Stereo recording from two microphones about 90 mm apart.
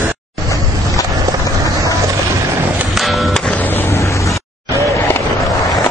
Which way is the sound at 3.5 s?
20° left (ahead or behind).